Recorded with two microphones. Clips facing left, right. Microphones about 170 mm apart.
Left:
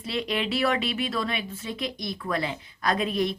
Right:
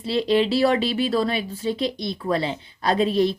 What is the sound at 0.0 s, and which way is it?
Speech, 30° right (ahead or behind).